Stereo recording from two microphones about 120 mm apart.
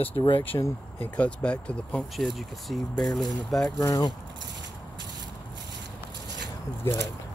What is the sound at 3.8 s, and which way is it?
Speech, 30° left (ahead or behind).